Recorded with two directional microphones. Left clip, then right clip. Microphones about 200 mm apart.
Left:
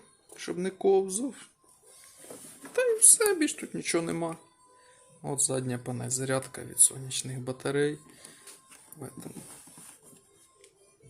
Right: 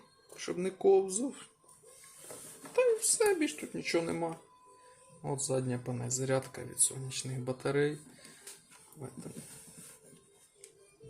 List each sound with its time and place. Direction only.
0.3 s speech: 15° left (ahead or behind)
2.7 s speech: 20° left (ahead or behind)